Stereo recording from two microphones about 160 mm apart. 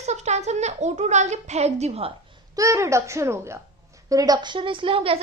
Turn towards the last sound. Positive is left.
turn(degrees=-35)  # may be behind; listen again after turning